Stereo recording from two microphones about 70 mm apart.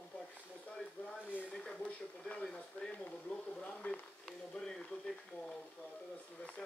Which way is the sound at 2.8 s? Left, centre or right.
Centre.